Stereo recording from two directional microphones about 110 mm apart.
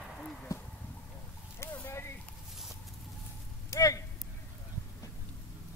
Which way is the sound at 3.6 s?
30° left (ahead or behind).